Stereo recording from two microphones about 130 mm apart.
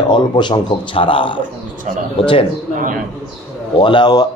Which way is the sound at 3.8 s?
40° left (ahead or behind).